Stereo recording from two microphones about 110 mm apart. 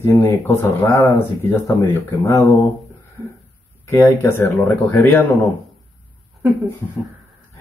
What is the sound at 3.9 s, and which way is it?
Speech, 20° left (ahead or behind).